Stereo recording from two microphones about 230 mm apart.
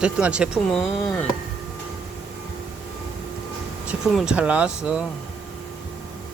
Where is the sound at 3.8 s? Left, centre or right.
Centre.